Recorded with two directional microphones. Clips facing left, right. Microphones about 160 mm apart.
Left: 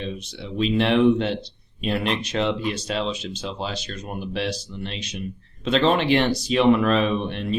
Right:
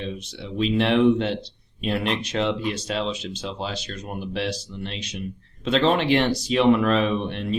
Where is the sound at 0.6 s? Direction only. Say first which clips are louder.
Left 1 dB; 20° left (ahead or behind).